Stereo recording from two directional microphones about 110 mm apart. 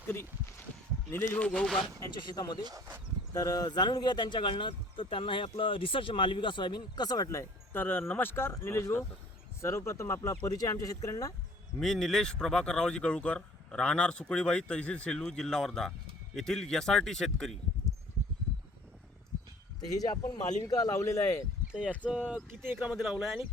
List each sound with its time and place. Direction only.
1.1 s speech: 20° left (ahead or behind)
1.5 s speech: 5° left (ahead or behind)
2.1 s speech: 45° left (ahead or behind)
3.3 s speech: 30° left (ahead or behind)
11.8 s speech: 5° left (ahead or behind)
19.9 s speech: 35° left (ahead or behind)
22.1 s speech: 10° right (ahead or behind)
23.0 s speech: centre (ahead or behind)